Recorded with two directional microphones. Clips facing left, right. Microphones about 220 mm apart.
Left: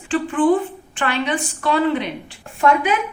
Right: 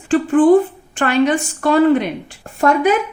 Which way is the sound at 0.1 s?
45° right (ahead or behind).